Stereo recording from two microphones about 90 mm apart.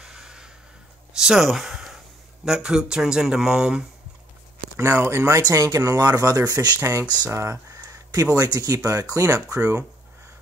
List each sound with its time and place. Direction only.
0.0 s a sound: 5° right (ahead or behind)
2.4 s speech: 5° right (ahead or behind)
4.7 s speech: 30° right (ahead or behind)
5.4 s speech: 45° right (ahead or behind)
6.8 s speech: 35° right (ahead or behind)
9.6 s speech: 20° right (ahead or behind)